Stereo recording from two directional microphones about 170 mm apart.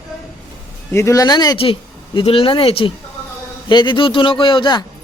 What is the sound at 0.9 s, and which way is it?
A man's voice, 20° left (ahead or behind).